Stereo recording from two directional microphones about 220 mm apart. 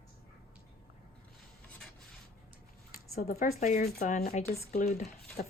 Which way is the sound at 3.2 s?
35° left (ahead or behind).